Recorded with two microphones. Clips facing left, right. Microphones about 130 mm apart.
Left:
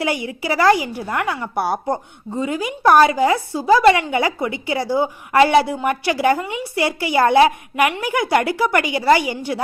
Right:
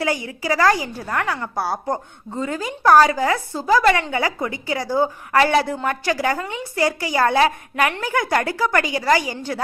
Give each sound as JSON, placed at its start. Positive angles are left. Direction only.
{"t": 0.0, "sound": "a woman's voice", "side_deg": 20}